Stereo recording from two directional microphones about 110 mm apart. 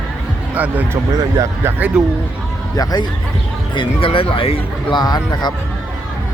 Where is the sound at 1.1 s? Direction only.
35° right (ahead or behind).